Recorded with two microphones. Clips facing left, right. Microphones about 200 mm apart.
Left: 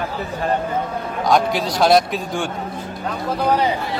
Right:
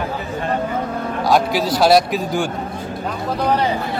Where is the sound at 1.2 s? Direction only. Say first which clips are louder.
Right 1 dB; 5° right (ahead or behind).